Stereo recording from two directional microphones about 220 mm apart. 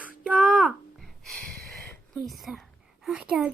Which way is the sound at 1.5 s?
45° right (ahead or behind).